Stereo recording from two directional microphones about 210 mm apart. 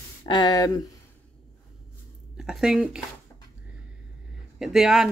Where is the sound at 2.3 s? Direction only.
5° right (ahead or behind).